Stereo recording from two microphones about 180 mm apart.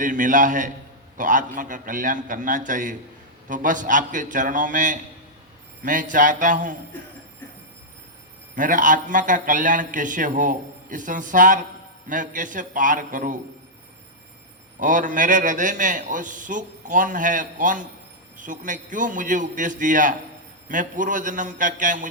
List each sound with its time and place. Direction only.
0.0 s a man's voice: 45° right (ahead or behind)
8.5 s a man's voice: 45° right (ahead or behind)
14.8 s a man's voice: 45° right (ahead or behind)